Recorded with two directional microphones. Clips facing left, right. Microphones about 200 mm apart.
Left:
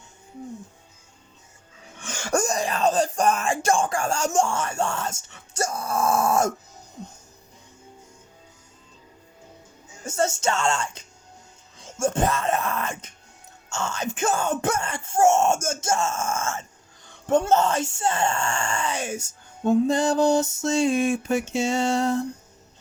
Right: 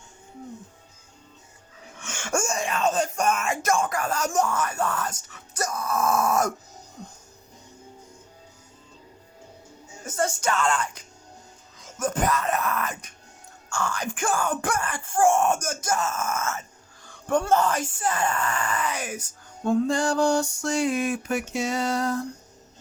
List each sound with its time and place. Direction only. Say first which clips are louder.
2.0 s speech: left 3 dB; 35° left (ahead or behind)
10.1 s speech: left 2 dB; 25° left (ahead or behind)